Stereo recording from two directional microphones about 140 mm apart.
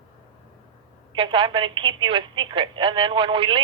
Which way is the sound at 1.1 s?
35° right (ahead or behind).